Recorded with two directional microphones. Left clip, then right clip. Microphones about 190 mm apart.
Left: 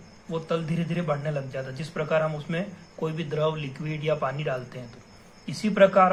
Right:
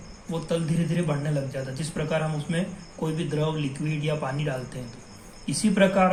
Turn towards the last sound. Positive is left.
turn(degrees=45)  # may be behind; listen again after turning